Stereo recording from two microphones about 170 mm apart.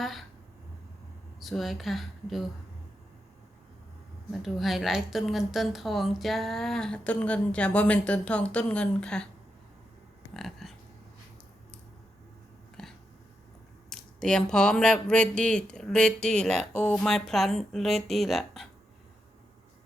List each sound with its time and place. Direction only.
0.0 s speech: centre (ahead or behind)
1.4 s a woman's voice: centre (ahead or behind)
4.3 s a woman's voice: centre (ahead or behind)
10.3 s a sound: centre (ahead or behind)
12.8 s a sound: 5° left (ahead or behind)
13.9 s a woman's voice: 5° left (ahead or behind)